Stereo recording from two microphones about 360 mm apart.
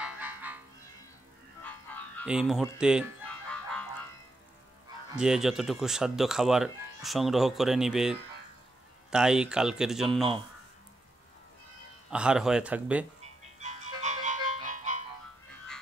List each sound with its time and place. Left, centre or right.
0.0 s music: centre
1.6 s fowl: centre
5.1 s speech: centre
12.1 s speech: centre
13.2 s music: centre